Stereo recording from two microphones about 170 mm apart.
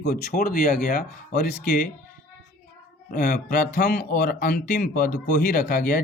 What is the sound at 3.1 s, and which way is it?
Speech, 50° left (ahead or behind).